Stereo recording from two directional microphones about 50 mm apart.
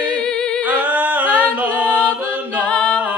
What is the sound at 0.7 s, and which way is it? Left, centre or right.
A capella, right.